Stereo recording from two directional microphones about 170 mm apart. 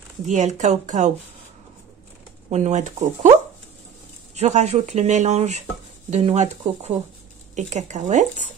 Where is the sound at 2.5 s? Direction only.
45° right (ahead or behind).